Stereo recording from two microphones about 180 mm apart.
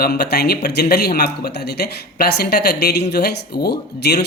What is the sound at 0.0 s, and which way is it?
Speech, 60° left (ahead or behind).